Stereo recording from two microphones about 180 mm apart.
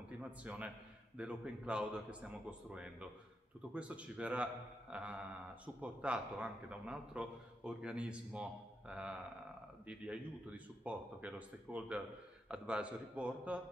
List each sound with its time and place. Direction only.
0.2 s a man's voice: 10° right (ahead or behind)